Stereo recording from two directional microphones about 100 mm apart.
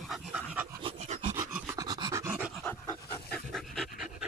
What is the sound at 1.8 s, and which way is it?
Pant, 40° right (ahead or behind).